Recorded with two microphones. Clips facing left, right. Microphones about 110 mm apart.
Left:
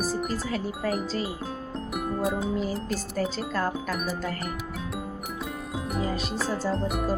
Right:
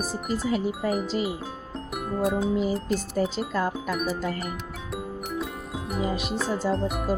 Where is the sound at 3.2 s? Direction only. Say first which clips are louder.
Right 1 dB; 15° right (ahead or behind).